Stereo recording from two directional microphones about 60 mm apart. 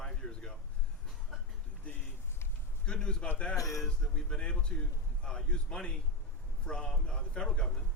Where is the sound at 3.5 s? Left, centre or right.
Left.